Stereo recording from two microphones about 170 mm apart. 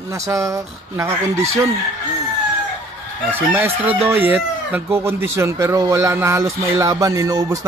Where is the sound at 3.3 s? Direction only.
10° right (ahead or behind).